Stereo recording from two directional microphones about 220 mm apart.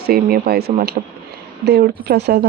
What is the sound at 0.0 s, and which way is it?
Speech, 45° right (ahead or behind).